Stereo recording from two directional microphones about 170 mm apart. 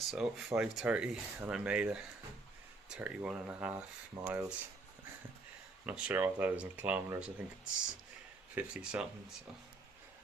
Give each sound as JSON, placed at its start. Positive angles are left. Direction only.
{"t": 0.1, "sound": "speech", "side_deg": -5}
{"t": 5.8, "sound": "speech", "side_deg": -10}
{"t": 8.5, "sound": "speech", "side_deg": -5}